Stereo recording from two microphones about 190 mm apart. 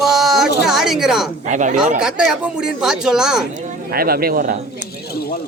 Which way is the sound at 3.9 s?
50° right (ahead or behind).